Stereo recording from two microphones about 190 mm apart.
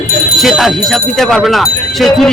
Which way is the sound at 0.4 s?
Centre (ahead or behind).